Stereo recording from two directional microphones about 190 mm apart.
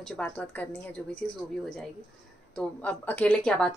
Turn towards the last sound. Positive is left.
turn(degrees=5)  # may be behind; listen again after turning